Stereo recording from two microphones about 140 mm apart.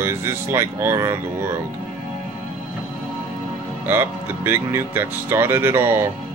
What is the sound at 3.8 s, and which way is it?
Speech, 15° right (ahead or behind).